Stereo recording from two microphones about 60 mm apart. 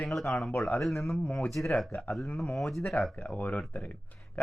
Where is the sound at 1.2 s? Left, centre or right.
Left.